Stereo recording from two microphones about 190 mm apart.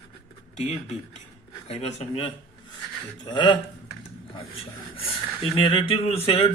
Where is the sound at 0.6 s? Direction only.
40° left (ahead or behind).